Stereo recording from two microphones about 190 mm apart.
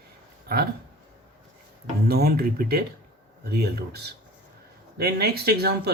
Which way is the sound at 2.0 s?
55° right (ahead or behind).